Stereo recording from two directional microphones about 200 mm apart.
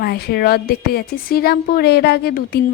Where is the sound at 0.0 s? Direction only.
50° left (ahead or behind).